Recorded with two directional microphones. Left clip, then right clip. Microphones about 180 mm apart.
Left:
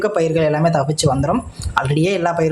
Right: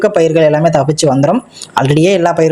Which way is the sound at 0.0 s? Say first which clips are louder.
Right 8 dB; 20° right (ahead or behind).